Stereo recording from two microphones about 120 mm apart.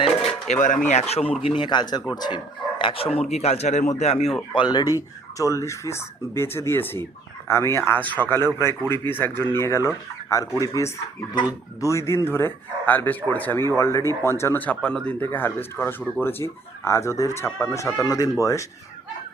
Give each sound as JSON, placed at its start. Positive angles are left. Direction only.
{"t": 0.0, "sound": "a sound", "side_deg": 55}
{"t": 0.5, "sound": "speech", "side_deg": 90}
{"t": 0.9, "sound": "speech", "side_deg": 65}
{"t": 1.4, "sound": "speech", "side_deg": 50}
{"t": 4.5, "sound": "speech", "side_deg": 35}
{"t": 5.4, "sound": "speech", "side_deg": 25}